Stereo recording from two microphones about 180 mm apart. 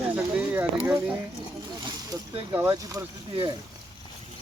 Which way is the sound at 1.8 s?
25° right (ahead or behind).